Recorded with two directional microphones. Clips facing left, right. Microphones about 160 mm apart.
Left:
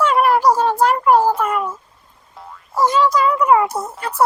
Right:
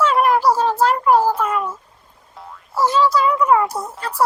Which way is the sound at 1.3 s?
5° left (ahead or behind).